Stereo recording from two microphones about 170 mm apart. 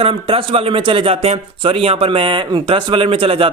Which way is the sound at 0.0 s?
35° right (ahead or behind).